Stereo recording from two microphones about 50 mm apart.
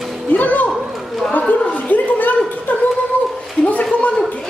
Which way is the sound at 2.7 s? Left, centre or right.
Left.